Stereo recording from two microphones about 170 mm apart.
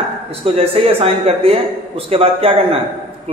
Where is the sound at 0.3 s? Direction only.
35° right (ahead or behind).